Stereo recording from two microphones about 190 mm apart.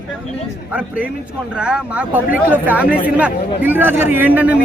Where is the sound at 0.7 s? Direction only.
5° right (ahead or behind).